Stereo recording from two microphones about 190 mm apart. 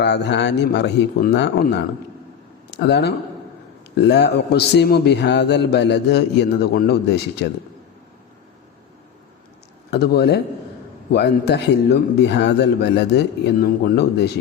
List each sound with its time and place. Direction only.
0.0 s a man's voice: 65° left (ahead or behind)
9.9 s a man's voice: 55° left (ahead or behind)